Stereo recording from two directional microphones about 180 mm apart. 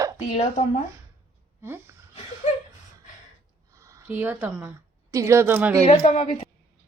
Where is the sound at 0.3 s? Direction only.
35° left (ahead or behind).